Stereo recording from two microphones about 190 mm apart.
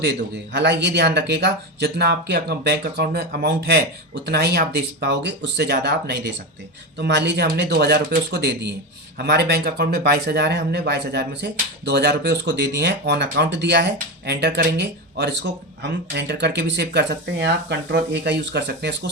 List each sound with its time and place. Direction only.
0.0 s speech: 65° right (ahead or behind)